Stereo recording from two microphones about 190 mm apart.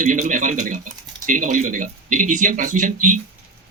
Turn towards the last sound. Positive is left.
turn(degrees=-40)  # may be behind; listen again after turning